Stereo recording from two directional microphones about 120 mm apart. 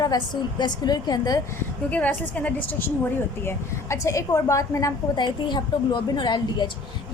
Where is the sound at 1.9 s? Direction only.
10° left (ahead or behind).